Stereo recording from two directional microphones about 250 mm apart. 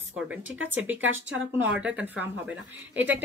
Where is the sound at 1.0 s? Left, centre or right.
Right.